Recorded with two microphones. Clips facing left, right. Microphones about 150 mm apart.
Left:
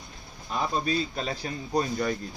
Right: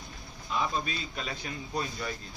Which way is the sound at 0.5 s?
40° left (ahead or behind).